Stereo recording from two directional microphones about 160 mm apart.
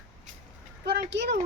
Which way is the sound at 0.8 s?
90° right.